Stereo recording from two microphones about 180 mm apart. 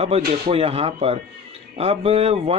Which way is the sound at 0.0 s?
35° right (ahead or behind).